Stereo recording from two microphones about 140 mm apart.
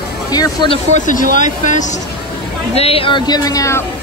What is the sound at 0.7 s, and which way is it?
Speech, 60° left (ahead or behind).